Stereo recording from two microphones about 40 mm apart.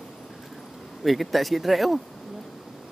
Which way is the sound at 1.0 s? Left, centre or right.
Centre.